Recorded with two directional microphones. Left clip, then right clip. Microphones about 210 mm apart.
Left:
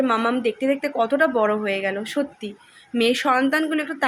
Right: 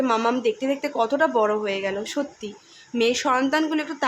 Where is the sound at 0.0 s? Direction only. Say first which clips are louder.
Left 1 dB; centre (ahead or behind).